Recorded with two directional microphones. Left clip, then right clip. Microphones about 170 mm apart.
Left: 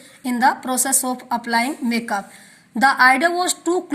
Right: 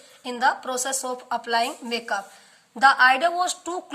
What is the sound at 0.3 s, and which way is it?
A woman's voice, 20° left (ahead or behind).